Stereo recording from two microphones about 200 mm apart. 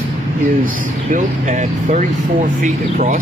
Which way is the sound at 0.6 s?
40° right (ahead or behind).